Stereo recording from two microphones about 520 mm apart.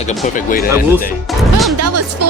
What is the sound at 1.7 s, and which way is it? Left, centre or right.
Speech, right.